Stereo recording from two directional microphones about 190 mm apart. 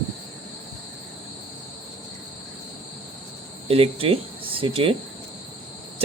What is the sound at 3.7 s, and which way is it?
Speech, 30° right (ahead or behind).